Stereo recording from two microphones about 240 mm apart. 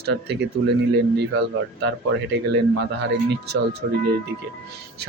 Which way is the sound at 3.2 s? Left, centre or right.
Right.